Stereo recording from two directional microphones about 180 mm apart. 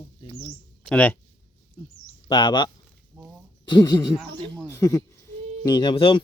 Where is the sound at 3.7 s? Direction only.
20° left (ahead or behind).